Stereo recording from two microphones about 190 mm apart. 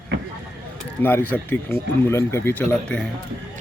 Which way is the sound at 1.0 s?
10° left (ahead or behind).